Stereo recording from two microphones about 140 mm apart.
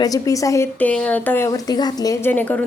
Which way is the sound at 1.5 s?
25° left (ahead or behind).